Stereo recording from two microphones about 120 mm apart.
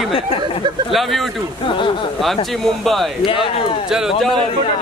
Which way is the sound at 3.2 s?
45° left (ahead or behind).